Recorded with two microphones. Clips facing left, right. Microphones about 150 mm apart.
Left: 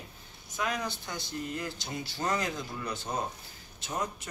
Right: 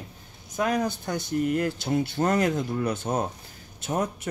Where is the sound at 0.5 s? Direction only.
50° right (ahead or behind).